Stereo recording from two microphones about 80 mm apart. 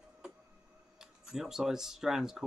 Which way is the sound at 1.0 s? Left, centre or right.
Centre.